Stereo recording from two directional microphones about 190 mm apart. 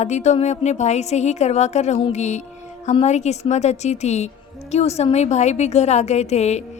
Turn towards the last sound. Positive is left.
turn(degrees=35)  # may be behind; listen again after turning